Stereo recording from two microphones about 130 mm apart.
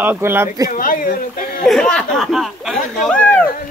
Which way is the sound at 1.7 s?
5° left (ahead or behind).